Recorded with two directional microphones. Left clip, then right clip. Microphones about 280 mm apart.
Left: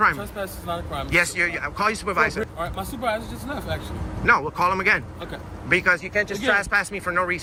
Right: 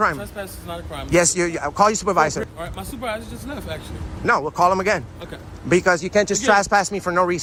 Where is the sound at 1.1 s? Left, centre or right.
Centre.